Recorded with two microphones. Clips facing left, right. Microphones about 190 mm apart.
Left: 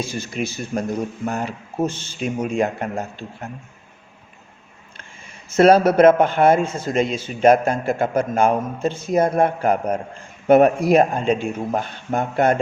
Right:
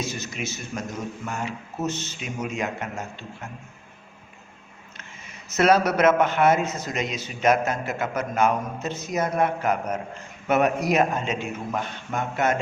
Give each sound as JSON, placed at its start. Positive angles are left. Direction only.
{"t": 0.0, "sound": "a man's voice", "side_deg": 30}
{"t": 5.5, "sound": "a man's voice", "side_deg": 30}